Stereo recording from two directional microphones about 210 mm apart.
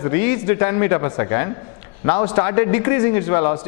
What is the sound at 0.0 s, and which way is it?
A man's voice, 15° left (ahead or behind).